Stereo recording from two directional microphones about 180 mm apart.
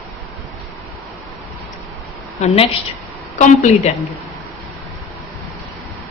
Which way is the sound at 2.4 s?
35° left (ahead or behind).